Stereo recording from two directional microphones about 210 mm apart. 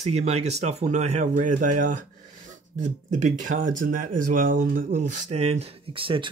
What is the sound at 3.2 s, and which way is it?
Speech, 35° right (ahead or behind).